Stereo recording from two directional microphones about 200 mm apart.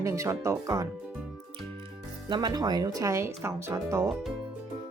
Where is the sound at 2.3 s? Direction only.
20° right (ahead or behind).